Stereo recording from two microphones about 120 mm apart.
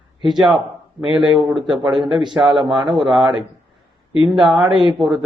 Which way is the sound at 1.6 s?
40° right (ahead or behind).